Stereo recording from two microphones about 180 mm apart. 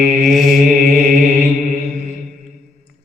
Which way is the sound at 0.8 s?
40° right (ahead or behind).